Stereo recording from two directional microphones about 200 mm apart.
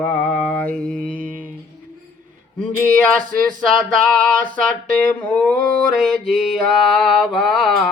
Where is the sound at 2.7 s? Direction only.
10° left (ahead or behind).